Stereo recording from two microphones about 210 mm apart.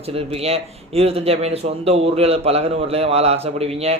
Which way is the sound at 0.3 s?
30° right (ahead or behind).